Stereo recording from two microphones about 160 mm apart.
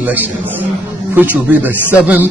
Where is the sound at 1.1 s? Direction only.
10° right (ahead or behind).